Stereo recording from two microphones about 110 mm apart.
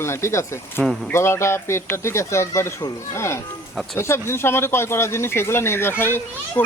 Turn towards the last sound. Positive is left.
turn(degrees=20)  # may be behind; listen again after turning